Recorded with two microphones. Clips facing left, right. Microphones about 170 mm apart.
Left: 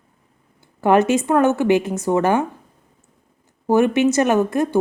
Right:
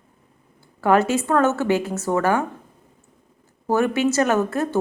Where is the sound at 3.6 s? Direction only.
15° left (ahead or behind).